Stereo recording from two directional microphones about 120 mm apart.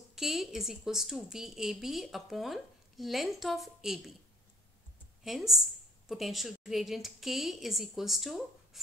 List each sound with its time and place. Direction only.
0.1 s a woman's voice: 5° right (ahead or behind)
5.2 s a woman's voice: centre (ahead or behind)